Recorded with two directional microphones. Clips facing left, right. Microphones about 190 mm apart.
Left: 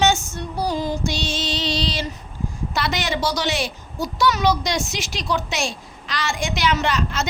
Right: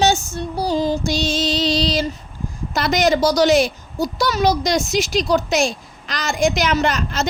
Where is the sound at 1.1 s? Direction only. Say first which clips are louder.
Right 6 dB; 40° right (ahead or behind).